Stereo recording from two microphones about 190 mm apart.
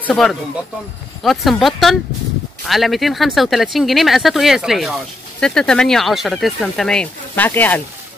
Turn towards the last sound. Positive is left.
turn(degrees=10)  # may be behind; listen again after turning